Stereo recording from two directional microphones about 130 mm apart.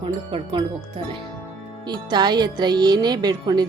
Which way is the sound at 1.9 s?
35° right (ahead or behind).